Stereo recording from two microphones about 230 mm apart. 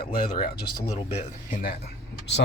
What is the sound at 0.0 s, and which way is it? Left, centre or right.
Speech, left.